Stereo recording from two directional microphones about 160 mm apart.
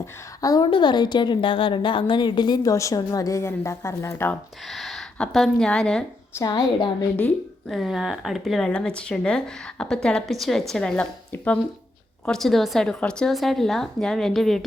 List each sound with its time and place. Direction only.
0.0 s a woman's voice: 20° left (ahead or behind)
4.7 s speech: centre (ahead or behind)
6.3 s a woman's voice: 25° left (ahead or behind)
7.7 s speech: centre (ahead or behind)